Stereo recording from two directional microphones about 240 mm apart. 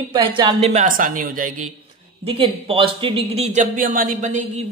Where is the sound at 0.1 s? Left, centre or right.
Right.